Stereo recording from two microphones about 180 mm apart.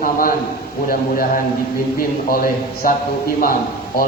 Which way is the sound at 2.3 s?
50° left (ahead or behind).